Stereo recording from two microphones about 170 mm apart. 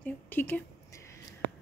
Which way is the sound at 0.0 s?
10° left (ahead or behind).